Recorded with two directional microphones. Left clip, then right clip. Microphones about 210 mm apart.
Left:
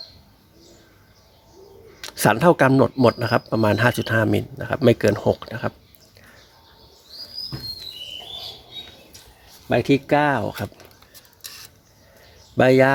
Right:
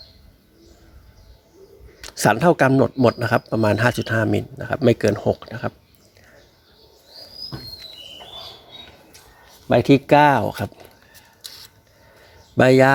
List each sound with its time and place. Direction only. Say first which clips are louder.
2.0 s speech: right 1 dB; 5° right (ahead or behind)
9.6 s speech: right 4 dB; 30° right (ahead or behind); by 10.7 s 15° right (ahead or behind)
12.5 s speech: right 1 dB; 15° right (ahead or behind)